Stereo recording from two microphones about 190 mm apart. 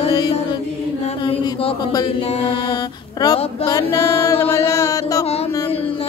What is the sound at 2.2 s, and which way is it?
Mantra, 20° left (ahead or behind).